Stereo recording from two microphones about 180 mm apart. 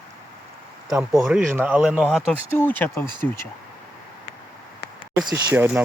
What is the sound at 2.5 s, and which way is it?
Speech, 10° left (ahead or behind).